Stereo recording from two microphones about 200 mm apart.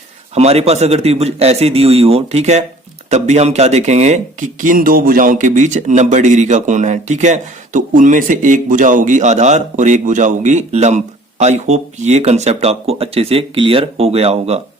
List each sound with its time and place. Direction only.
0.3 s speech: 30° right (ahead or behind)